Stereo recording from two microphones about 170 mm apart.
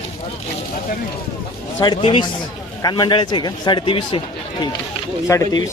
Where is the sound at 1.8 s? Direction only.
30° left (ahead or behind).